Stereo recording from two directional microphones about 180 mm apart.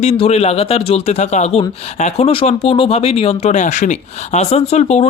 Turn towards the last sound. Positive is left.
turn(degrees=35)  # may be behind; listen again after turning